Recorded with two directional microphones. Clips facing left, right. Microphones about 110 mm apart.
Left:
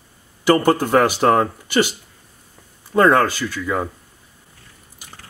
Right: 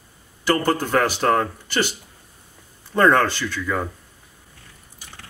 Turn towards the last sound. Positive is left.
turn(degrees=10)  # may be behind; listen again after turning